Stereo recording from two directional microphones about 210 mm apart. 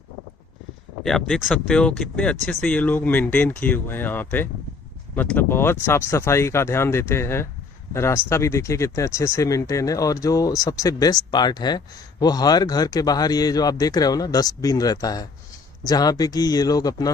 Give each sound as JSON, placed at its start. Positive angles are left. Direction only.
{"t": 1.0, "sound": "speech", "side_deg": 0}